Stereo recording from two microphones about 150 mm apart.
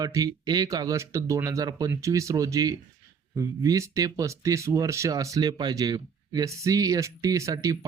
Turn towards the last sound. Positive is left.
turn(degrees=-25)  # may be behind; listen again after turning